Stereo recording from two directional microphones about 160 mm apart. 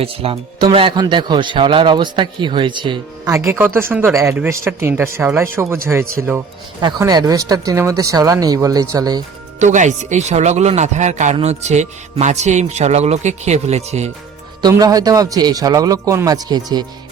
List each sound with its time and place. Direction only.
0.0 s speech: 35° right (ahead or behind)
3.2 s speech: 20° right (ahead or behind)
6.8 s speech: 25° right (ahead or behind)
9.6 s speech: 50° right (ahead or behind)
14.6 s speech: 25° right (ahead or behind)